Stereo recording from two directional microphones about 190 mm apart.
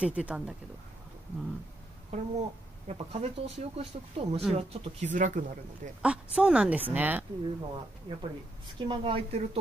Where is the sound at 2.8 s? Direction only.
35° right (ahead or behind).